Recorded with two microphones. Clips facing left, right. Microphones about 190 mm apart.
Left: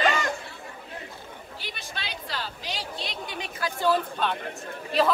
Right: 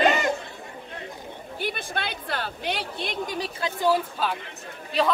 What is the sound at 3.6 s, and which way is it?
Speech, 15° right (ahead or behind).